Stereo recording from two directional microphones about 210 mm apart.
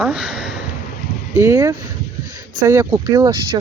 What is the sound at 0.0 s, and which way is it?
Speech, 5° right (ahead or behind).